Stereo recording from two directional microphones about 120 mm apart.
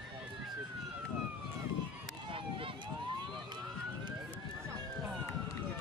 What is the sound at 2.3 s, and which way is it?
Emergency vehicle, 45° right (ahead or behind).